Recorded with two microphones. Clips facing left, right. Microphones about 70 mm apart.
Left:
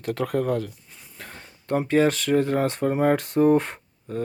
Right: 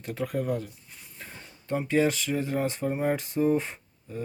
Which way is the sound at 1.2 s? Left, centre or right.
Left.